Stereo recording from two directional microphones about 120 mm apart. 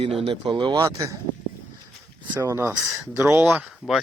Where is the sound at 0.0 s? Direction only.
50° right (ahead or behind); by 1.2 s 25° right (ahead or behind).